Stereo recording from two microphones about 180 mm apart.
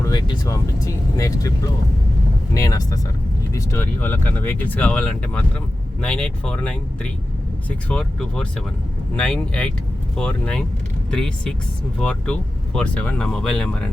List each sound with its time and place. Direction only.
0.0 s speech: 25° left (ahead or behind); by 13.9 s 5° left (ahead or behind)